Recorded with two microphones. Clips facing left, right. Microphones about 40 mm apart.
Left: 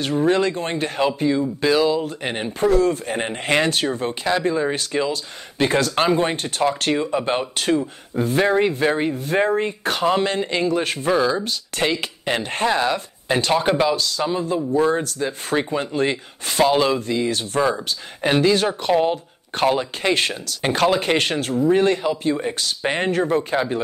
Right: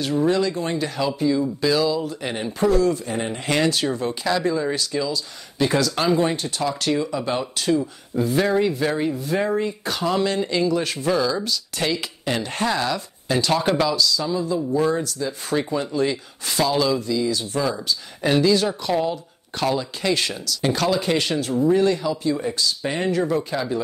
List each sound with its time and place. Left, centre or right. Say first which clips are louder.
0.3 s speech: left 2 dB; left
4.7 s speech: left 2 dB; left
13.9 s speech: even; left
22.6 s speech: left 1 dB; left